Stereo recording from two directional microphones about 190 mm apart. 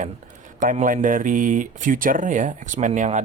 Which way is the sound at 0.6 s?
45° right (ahead or behind).